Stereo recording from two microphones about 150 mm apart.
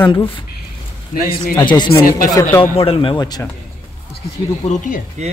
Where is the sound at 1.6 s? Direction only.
30° left (ahead or behind).